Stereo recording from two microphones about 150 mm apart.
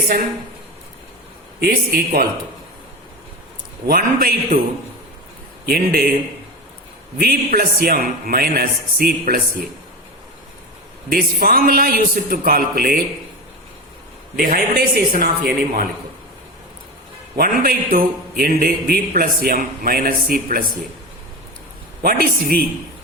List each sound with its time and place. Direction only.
1.5 s a man's voice: 90° right
3.8 s a man's voice: 75° right (ahead or behind)
5.6 s a man's voice: 80° right
7.2 s a man's voice: 80° right
11.1 s a man's voice: 70° right (ahead or behind)
14.3 s a man's voice: 85° right
17.3 s a man's voice: 85° right; by 20.7 s 70° right (ahead or behind)
22.0 s a man's voice: 80° right